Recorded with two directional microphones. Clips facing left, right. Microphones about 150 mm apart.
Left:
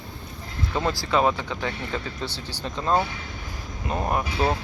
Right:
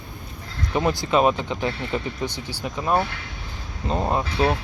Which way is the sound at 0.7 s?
20° right (ahead or behind).